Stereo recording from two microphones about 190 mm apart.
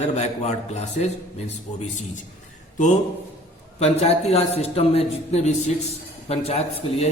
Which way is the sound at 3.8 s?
35° left (ahead or behind).